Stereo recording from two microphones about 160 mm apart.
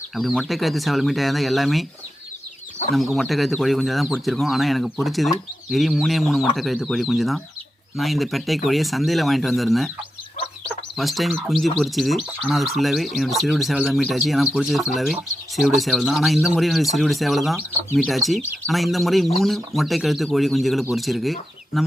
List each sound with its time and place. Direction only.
0.2 s speech: centre (ahead or behind)
2.9 s speech: centre (ahead or behind)